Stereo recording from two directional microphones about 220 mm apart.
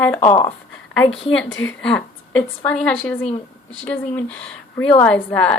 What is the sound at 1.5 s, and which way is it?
Speech, 60° left (ahead or behind).